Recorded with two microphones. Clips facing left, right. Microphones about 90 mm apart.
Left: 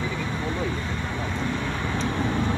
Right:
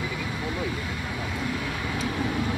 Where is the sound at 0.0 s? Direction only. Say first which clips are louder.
Left 2 dB; 25° left (ahead or behind).